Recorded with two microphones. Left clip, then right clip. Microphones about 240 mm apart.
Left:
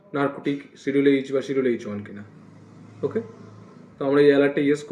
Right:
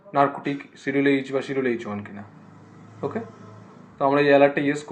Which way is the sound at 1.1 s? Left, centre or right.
Right.